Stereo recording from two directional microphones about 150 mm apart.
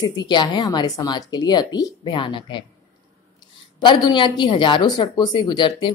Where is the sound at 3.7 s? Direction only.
30° left (ahead or behind).